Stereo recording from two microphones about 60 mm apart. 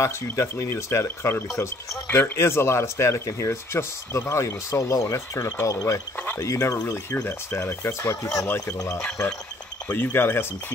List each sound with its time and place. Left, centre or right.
0.0 s speech: left
2.0 s speech: left
2.3 s speech: left
6.1 s speech: left
6.4 s speech: left
7.2 s speech: left
9.8 s speech: left